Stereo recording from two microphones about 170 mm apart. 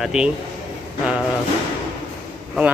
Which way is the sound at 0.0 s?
5° right (ahead or behind).